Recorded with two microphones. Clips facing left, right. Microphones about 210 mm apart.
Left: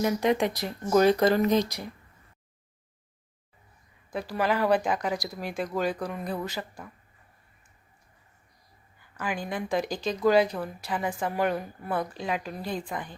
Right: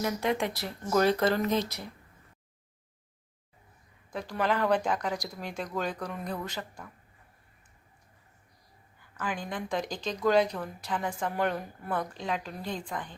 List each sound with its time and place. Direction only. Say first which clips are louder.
0.0 s speech: left 5 dB; 20° left (ahead or behind)
4.1 s speech: left 2 dB; 10° left (ahead or behind)
9.1 s speech: left 3 dB; 10° left (ahead or behind)